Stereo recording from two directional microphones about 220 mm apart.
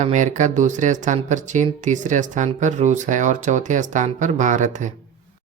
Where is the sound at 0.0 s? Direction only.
35° right (ahead or behind).